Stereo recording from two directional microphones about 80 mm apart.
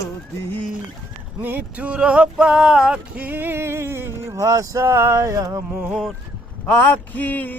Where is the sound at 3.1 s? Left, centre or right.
Right.